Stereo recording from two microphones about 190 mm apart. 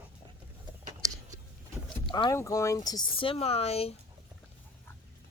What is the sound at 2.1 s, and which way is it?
Speech, 20° left (ahead or behind).